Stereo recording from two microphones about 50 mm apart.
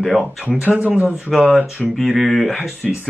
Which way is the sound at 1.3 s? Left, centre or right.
Centre.